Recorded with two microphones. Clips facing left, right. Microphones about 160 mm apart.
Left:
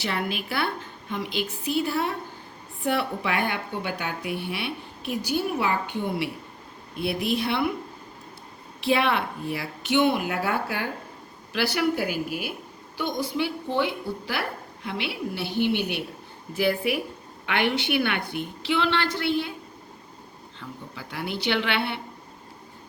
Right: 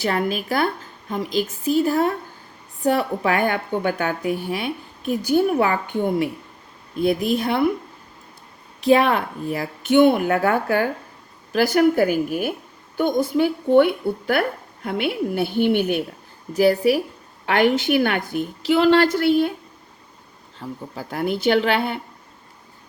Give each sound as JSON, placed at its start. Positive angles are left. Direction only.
{"t": 0.0, "sound": "speech", "side_deg": -45}
{"t": 8.8, "sound": "speech", "side_deg": -40}
{"t": 16.6, "sound": "a woman's voice", "side_deg": -40}
{"t": 20.6, "sound": "speech", "side_deg": -40}